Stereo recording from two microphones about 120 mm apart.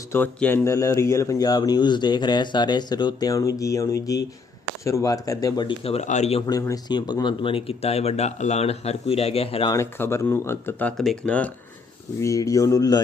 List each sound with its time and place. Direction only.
0.1 s speech: 15° left (ahead or behind); by 5.7 s 35° left (ahead or behind)
5.8 s speech: 65° left (ahead or behind)
6.5 s speech: 30° left (ahead or behind); by 9.6 s 55° left (ahead or behind)
9.6 s speech: 25° left (ahead or behind)
10.9 s speech: 5° left (ahead or behind)
12.2 s speech: 25° left (ahead or behind)